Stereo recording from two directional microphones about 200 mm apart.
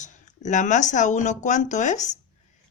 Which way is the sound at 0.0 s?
35° left (ahead or behind).